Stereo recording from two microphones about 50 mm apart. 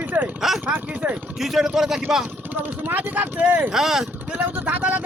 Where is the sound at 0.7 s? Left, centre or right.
Right.